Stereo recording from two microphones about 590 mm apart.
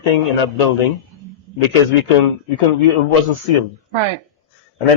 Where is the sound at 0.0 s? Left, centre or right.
Left.